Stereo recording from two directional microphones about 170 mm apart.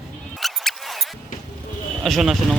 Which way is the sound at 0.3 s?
Centre (ahead or behind).